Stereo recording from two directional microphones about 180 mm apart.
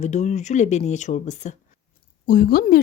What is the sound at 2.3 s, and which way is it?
Speech, 55° left (ahead or behind).